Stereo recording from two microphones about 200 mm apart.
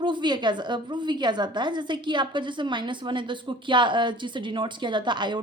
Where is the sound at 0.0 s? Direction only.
25° right (ahead or behind).